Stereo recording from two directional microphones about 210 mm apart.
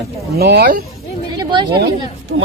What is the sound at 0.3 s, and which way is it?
Speech, 50° right (ahead or behind).